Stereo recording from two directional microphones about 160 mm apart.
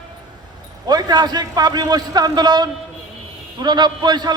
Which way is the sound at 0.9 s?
25° right (ahead or behind).